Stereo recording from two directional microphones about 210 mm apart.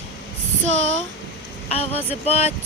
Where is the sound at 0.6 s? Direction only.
60° right (ahead or behind).